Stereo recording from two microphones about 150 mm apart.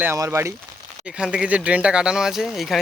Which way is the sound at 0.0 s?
15° right (ahead or behind).